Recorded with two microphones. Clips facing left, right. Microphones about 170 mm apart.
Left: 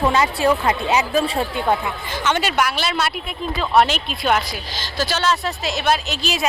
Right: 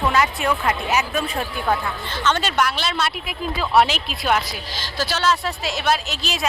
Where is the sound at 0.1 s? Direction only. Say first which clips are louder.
Left 3 dB; 30° left (ahead or behind).